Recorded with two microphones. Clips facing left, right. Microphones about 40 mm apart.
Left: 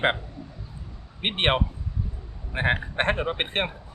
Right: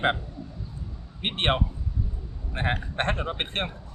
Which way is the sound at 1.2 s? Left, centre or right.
Left.